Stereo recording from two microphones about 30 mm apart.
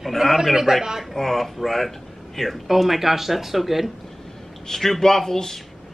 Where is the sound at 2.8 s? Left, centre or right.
Centre.